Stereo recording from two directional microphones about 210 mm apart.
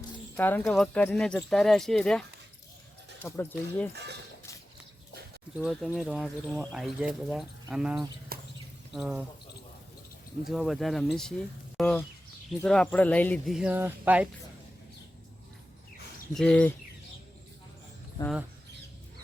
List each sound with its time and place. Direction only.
0.3 s speech: 10° left (ahead or behind)
3.2 s speech: 10° left (ahead or behind)
3.9 s speech: 55° right (ahead or behind)
5.5 s speech: centre (ahead or behind)
8.3 s a sound: 45° right (ahead or behind)
8.9 s speech: centre (ahead or behind)
10.5 s speech: centre (ahead or behind)
16.3 s speech: 5° left (ahead or behind)